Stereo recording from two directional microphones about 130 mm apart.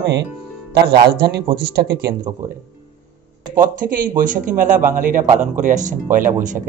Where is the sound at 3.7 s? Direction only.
90° right.